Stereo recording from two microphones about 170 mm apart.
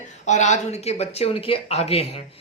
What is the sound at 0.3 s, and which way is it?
Speech, 45° left (ahead or behind).